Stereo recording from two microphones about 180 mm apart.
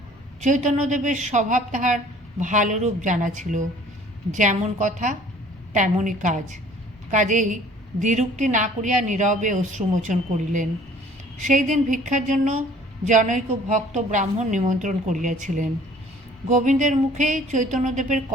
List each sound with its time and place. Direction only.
0.4 s a woman's voice: 40° right (ahead or behind)